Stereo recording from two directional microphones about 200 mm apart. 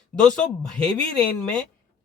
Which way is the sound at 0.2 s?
5° left (ahead or behind).